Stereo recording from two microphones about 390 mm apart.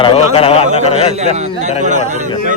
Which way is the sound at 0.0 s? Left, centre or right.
Centre.